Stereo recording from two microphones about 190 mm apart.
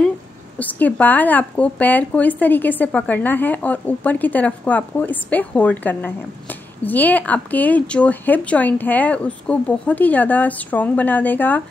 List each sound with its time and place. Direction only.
0.6 s speech: 10° left (ahead or behind)